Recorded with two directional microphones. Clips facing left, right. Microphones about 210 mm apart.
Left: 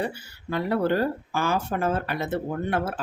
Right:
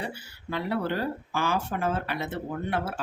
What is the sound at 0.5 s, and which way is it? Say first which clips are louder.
Speech: left 5 dB; 45° left (ahead or behind).